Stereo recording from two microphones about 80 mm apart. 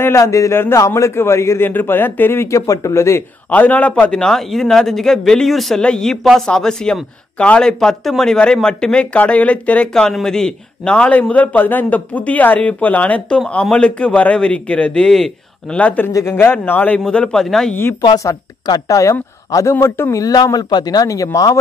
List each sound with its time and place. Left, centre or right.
0.2 s speech: left
1.7 s speech: left
3.4 s speech: centre
16.1 s speech: left
16.3 s a man's voice: left
17.0 s speech: centre
18.7 s speech: left